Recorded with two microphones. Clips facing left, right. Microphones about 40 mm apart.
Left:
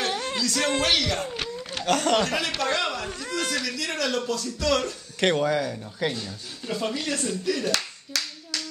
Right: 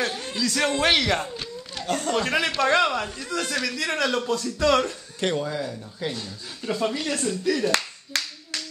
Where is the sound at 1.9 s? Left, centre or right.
Left.